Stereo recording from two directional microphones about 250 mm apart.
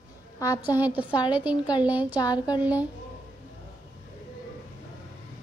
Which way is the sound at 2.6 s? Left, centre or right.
Centre.